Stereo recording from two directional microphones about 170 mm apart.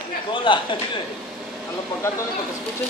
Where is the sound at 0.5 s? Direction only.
30° left (ahead or behind).